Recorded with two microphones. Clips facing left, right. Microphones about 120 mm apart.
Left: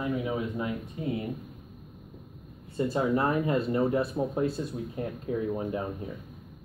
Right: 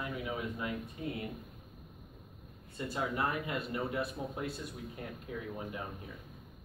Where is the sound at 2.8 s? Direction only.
35° left (ahead or behind).